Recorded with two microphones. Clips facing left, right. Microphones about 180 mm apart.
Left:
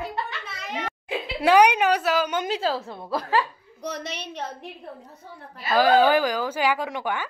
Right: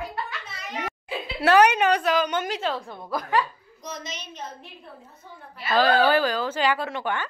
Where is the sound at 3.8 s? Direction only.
65° left (ahead or behind).